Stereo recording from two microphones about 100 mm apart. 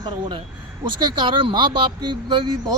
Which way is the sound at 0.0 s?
55° right (ahead or behind).